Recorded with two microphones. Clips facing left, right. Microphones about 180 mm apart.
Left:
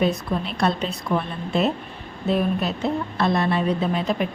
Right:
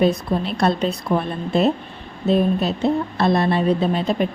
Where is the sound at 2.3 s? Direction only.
30° right (ahead or behind).